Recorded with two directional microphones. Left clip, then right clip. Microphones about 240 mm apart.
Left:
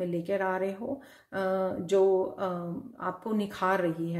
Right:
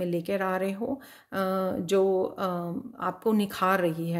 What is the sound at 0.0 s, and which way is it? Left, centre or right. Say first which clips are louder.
Speech: right 1 dB; right.